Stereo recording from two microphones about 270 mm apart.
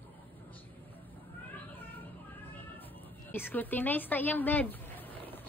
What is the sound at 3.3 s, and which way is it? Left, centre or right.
A woman's voice, centre.